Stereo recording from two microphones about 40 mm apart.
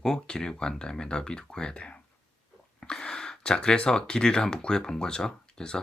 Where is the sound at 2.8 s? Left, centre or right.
Left.